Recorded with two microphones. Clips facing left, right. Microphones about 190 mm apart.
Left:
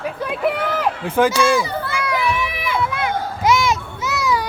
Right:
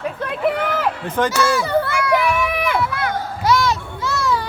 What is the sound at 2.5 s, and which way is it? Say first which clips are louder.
Run: right 3 dB; 55° right (ahead or behind).